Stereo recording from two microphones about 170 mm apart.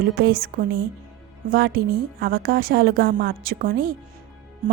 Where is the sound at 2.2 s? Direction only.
60° right (ahead or behind).